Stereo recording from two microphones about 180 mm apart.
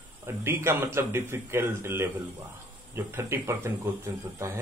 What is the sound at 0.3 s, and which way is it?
Speech, 15° right (ahead or behind).